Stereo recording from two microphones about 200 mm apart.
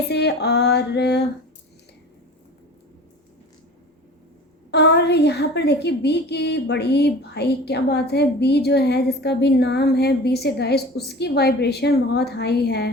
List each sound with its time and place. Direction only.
0.1 s a woman's voice: 55° left (ahead or behind)
4.7 s a woman's voice: 55° left (ahead or behind)